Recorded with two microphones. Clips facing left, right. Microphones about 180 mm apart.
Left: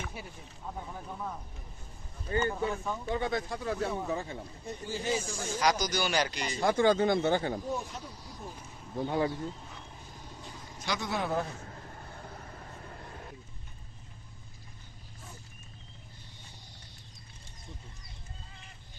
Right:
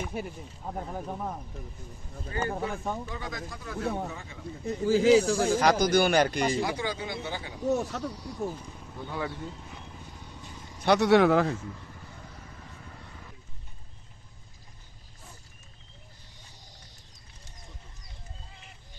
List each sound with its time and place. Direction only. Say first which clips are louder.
0.1 s speech: right 10 dB; 50° right (ahead or behind)
1.0 s speech: right 4 dB; 35° right (ahead or behind)
3.2 s speech: left 6 dB; 25° left (ahead or behind)
4.7 s speech: right 13 dB; 90° right; by 6.6 s 50° right (ahead or behind)
6.6 s speech: left 6 dB; 50° left (ahead or behind)
7.6 s speech: right 8 dB; 75° right (ahead or behind)
9.0 s speech: left 4 dB; 35° left (ahead or behind)
10.8 s a man's voice: right 13 dB; 65° right (ahead or behind); by 11.5 s 90° right